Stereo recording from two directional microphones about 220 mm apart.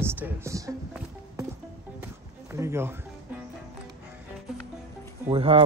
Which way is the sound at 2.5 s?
10° right (ahead or behind).